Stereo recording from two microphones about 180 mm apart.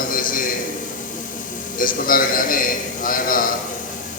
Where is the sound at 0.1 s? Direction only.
50° left (ahead or behind).